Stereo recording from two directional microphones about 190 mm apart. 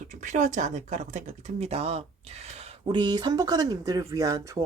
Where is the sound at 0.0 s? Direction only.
40° right (ahead or behind).